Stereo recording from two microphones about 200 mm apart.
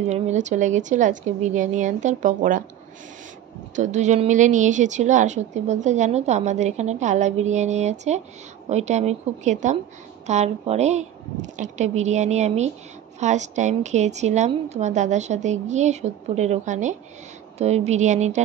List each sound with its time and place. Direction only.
0.1 s a woman's voice: 35° right (ahead or behind)
3.7 s a woman's voice: 35° right (ahead or behind)